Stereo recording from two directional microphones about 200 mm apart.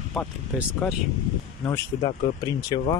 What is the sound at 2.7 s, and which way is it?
Speech, 20° left (ahead or behind).